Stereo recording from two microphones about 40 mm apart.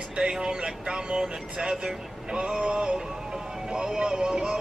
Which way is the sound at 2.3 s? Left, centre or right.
Right.